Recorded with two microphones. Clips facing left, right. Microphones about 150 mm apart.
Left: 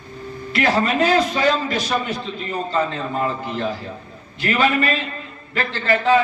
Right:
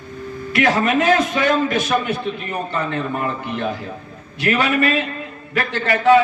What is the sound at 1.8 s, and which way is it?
A man's voice, 60° right (ahead or behind).